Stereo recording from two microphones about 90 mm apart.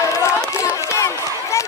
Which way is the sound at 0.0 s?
35° left (ahead or behind).